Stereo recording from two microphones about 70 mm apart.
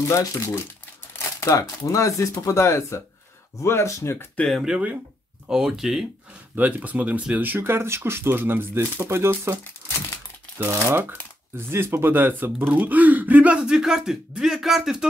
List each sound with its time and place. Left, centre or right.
0.1 s speech: left
4.5 s speech: centre
6.5 s speech: right
10.6 s speech: right; by 15.0 s centre